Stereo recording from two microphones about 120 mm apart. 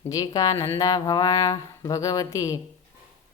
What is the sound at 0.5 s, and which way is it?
Speech, 20° left (ahead or behind).